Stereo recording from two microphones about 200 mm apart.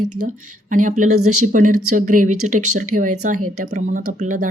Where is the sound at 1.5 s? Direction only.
40° right (ahead or behind).